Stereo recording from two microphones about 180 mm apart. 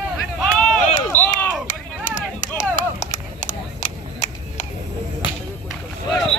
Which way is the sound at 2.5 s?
45° left (ahead or behind).